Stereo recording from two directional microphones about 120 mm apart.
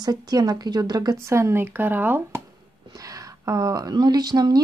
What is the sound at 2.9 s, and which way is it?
Speech, 30° right (ahead or behind).